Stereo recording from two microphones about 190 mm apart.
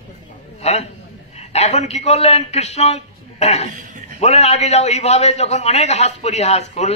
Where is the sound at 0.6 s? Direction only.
30° left (ahead or behind).